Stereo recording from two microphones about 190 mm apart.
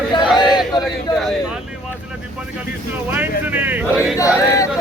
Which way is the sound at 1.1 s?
Centre (ahead or behind).